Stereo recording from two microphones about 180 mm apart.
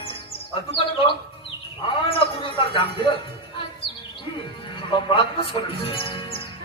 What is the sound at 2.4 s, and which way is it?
Speech, 30° left (ahead or behind).